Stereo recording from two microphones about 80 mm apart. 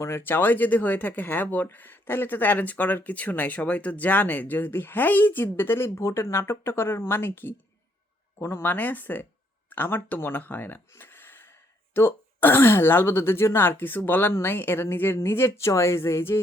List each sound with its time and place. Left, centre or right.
0.0 s speech: left